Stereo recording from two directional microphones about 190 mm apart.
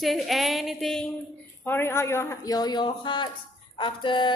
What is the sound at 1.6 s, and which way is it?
A woman's voice, 10° left (ahead or behind).